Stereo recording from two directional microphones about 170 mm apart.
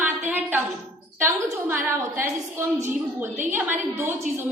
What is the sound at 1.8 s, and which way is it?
A woman's voice, 15° right (ahead or behind).